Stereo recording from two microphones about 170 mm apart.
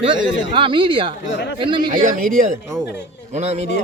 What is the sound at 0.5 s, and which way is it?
Speech, 30° right (ahead or behind).